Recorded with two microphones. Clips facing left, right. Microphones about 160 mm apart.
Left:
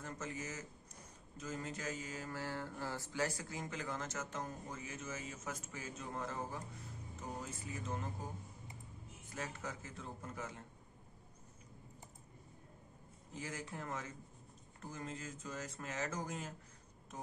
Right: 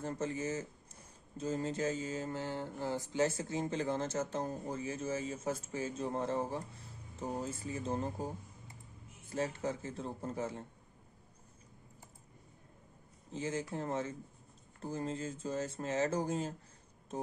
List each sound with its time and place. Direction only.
0.0 s mantra: 30° right (ahead or behind)
7.2 s speech: 30° right (ahead or behind)
9.3 s speech: 30° right (ahead or behind)
13.3 s mantra: 25° right (ahead or behind)
14.8 s speech: 30° right (ahead or behind)